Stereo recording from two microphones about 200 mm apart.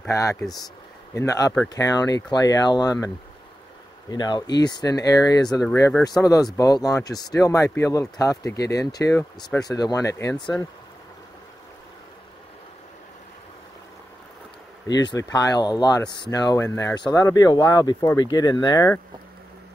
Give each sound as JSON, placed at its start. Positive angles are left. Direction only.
{"t": 0.0, "sound": "speech", "side_deg": 15}
{"t": 4.1, "sound": "speech", "side_deg": 20}
{"t": 14.9, "sound": "speech", "side_deg": 20}